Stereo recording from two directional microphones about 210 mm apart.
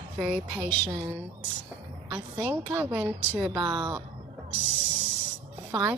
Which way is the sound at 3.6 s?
20° right (ahead or behind).